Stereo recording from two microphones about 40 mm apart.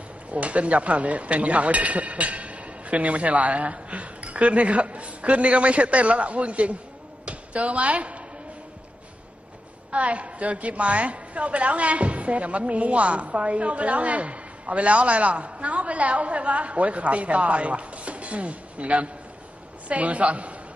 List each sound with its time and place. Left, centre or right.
0.3 s a woman's voice: right
7.2 s a sound: right
9.8 s a woman's voice: right